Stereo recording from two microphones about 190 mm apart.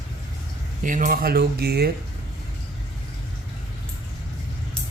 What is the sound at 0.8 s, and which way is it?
Speech, 45° right (ahead or behind).